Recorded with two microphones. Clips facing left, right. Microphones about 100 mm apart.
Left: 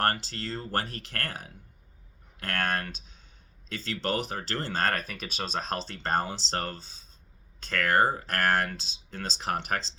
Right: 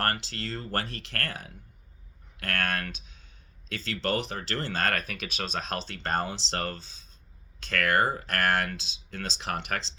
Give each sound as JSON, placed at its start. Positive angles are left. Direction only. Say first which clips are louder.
{"t": 0.0, "sound": "speech", "louder": "left 2 dB", "side_deg": 35}
{"t": 2.9, "sound": "a sound", "louder": "right 1 dB", "side_deg": 40}
{"t": 3.7, "sound": "speech", "louder": "right 1 dB", "side_deg": 40}
{"t": 4.9, "sound": "speech", "louder": "even", "side_deg": -50}
{"t": 5.3, "sound": "speech", "louder": "left 1 dB", "side_deg": 35}